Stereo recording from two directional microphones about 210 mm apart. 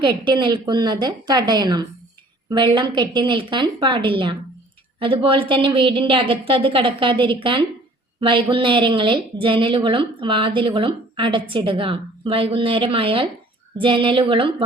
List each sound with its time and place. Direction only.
0.0 s a woman's voice: 20° right (ahead or behind)